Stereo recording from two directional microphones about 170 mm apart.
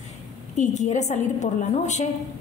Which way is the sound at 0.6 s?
45° left (ahead or behind).